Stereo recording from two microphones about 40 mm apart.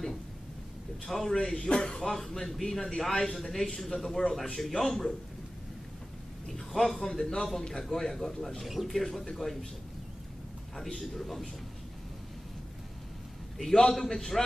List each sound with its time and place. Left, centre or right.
1.0 s speech: centre
2.0 s speech: centre
6.4 s a sound: centre
7.2 s speech: centre
11.0 s a man's voice: centre
13.6 s speech: centre